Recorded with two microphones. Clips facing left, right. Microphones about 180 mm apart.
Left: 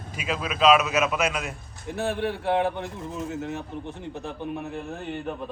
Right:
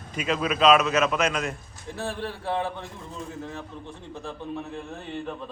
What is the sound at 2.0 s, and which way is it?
A man's voice, 65° left (ahead or behind).